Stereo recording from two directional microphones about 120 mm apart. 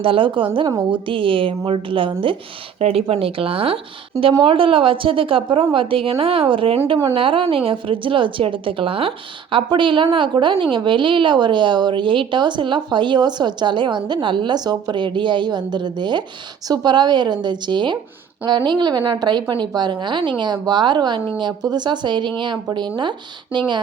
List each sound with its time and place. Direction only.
0.0 s a woman's voice: 45° right (ahead or behind)